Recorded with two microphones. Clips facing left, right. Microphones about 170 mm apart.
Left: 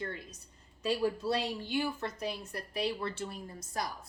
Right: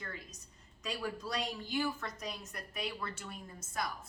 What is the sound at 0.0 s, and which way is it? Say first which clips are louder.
Speech: left 7 dB; 30° left (ahead or behind).